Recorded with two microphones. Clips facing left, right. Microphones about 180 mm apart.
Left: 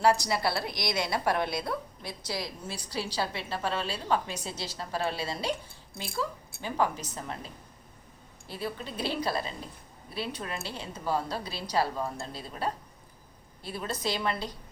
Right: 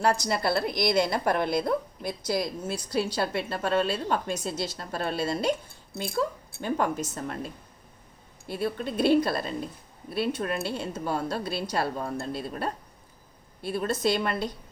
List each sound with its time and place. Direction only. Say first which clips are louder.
0.0 s a woman's voice: even; 50° right (ahead or behind)